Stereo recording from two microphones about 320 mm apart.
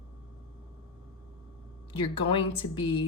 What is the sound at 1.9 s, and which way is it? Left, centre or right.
A woman's voice, centre.